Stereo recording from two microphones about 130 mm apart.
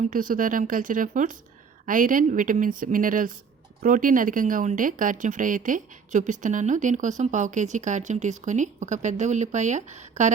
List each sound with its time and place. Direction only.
0.1 s a woman's voice: 90° right; by 10.3 s 65° right (ahead or behind)